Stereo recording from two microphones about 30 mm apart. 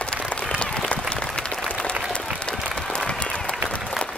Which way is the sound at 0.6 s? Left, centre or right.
Left.